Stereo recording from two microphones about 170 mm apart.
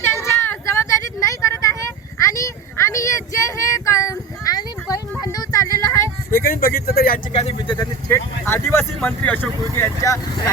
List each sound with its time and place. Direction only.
0.0 s vehicle: 15° left (ahead or behind)
5.2 s a sound: 20° left (ahead or behind)
5.8 s vehicle: 20° left (ahead or behind)
6.3 s speech: 60° left (ahead or behind)
7.3 s speech: 30° left (ahead or behind)
8.1 s speech: 15° left (ahead or behind)